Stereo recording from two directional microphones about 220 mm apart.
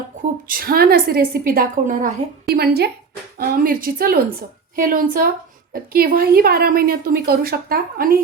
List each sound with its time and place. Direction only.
0.4 s a woman's voice: 40° right (ahead or behind)